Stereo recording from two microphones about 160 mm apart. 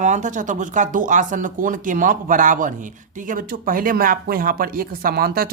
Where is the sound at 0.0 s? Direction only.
50° right (ahead or behind).